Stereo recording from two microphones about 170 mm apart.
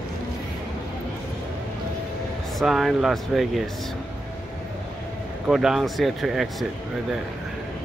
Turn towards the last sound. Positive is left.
turn(degrees=0)  # may be behind; listen again after turning